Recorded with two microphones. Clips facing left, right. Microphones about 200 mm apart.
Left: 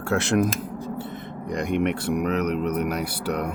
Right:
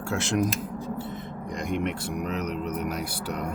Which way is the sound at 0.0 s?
65° left (ahead or behind).